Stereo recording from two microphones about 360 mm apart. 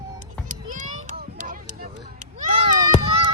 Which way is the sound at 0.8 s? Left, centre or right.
Right.